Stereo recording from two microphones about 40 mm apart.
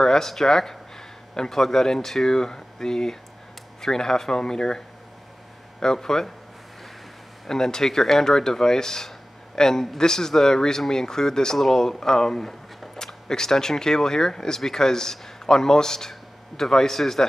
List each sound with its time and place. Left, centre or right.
0.0 s speech: centre
7.4 s speech: centre